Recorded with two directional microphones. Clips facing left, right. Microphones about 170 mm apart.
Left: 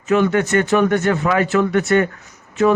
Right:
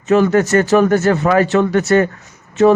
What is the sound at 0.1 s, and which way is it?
A man's voice, 40° right (ahead or behind).